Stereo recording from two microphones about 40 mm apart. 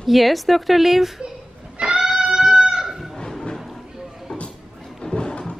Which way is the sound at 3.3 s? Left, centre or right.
Centre.